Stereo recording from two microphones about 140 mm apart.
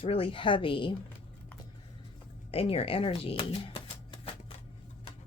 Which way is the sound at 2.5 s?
45° left (ahead or behind).